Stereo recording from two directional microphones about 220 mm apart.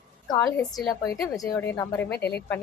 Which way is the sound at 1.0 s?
15° left (ahead or behind).